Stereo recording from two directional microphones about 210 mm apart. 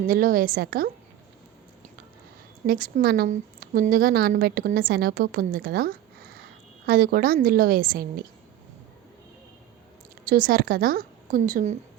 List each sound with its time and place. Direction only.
0.1 s a woman's voice: 40° right (ahead or behind)
2.6 s a woman's voice: 45° right (ahead or behind)
10.2 s a woman's voice: 40° right (ahead or behind)